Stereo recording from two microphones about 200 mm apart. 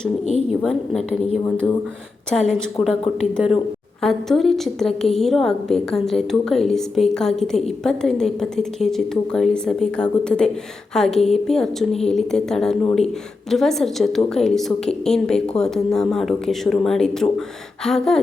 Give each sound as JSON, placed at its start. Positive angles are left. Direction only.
{"t": 0.6, "sound": "a woman's voice", "side_deg": 0}